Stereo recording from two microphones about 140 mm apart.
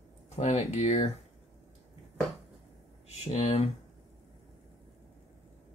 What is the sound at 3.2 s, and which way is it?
Speech, 45° left (ahead or behind).